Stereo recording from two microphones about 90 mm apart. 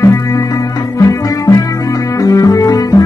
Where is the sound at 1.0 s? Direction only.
35° left (ahead or behind).